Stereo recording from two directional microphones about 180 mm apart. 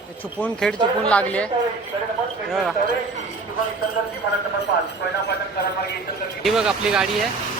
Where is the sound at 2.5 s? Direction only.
Centre (ahead or behind).